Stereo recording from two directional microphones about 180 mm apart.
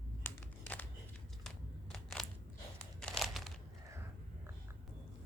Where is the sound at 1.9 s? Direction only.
Centre (ahead or behind).